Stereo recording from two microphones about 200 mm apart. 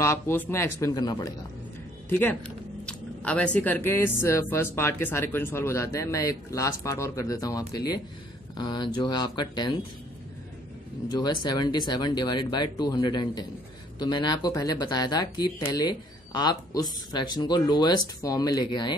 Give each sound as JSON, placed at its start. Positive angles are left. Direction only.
{"t": 0.0, "sound": "speech", "side_deg": 10}
{"t": 11.1, "sound": "speech", "side_deg": 20}